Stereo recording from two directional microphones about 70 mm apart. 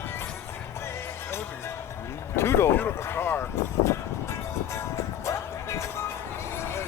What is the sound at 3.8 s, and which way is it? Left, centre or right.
Music, left.